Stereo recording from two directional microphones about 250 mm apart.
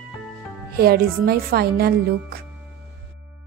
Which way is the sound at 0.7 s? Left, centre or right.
Right.